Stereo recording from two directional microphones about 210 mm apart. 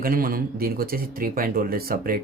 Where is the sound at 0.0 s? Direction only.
45° right (ahead or behind).